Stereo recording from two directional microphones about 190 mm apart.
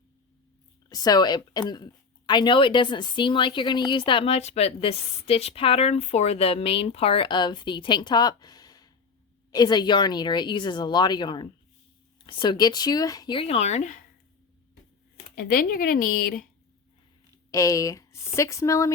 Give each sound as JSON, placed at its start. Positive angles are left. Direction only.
{"t": 0.9, "sound": "speech", "side_deg": 20}
{"t": 15.4, "sound": "speech", "side_deg": 55}
{"t": 17.5, "sound": "speech", "side_deg": 15}